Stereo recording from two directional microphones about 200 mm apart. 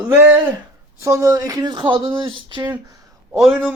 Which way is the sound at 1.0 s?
15° right (ahead or behind).